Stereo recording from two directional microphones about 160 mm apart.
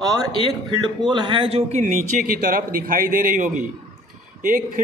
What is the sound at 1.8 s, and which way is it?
A man's voice, 50° right (ahead or behind).